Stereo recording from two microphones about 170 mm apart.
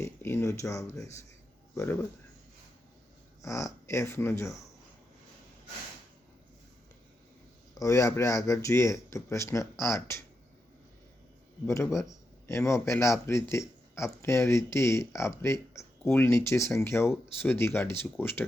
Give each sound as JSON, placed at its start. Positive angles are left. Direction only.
{"t": 0.0, "sound": "speech", "side_deg": 15}
{"t": 3.4, "sound": "speech", "side_deg": 15}
{"t": 7.8, "sound": "speech", "side_deg": 20}
{"t": 11.6, "sound": "speech", "side_deg": 15}
{"t": 11.9, "sound": "speech", "side_deg": 0}
{"t": 12.5, "sound": "speech", "side_deg": 15}